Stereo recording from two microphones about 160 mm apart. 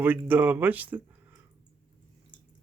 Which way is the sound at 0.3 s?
10° right (ahead or behind).